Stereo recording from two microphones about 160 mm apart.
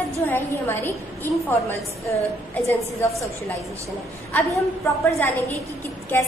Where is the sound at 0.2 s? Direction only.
15° left (ahead or behind).